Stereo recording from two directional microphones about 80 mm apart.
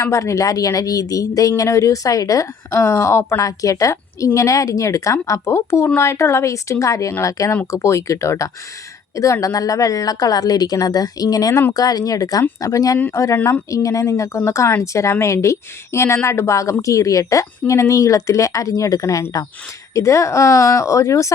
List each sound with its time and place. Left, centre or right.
0.0 s speech: left